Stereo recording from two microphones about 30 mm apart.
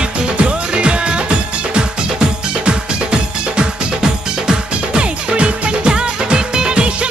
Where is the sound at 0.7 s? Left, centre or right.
Right.